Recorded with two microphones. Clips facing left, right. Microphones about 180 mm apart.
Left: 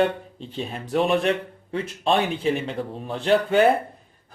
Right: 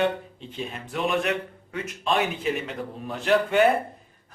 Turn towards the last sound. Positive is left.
turn(degrees=35)  # may be behind; listen again after turning